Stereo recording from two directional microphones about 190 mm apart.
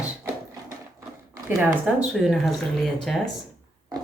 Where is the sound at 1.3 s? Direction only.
15° right (ahead or behind).